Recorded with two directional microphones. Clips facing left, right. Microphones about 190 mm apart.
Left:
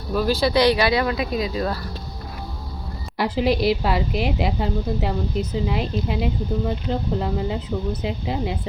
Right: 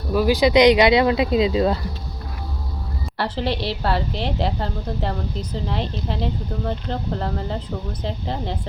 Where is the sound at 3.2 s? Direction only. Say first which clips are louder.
Left 4 dB; 10° left (ahead or behind).